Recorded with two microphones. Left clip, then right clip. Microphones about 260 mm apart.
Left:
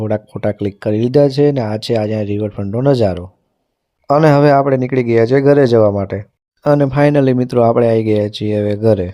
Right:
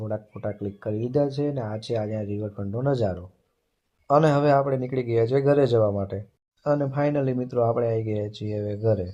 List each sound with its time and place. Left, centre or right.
0.0 s a man's voice: left